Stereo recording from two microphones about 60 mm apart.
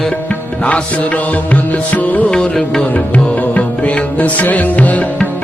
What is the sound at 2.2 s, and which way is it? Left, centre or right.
Music, centre.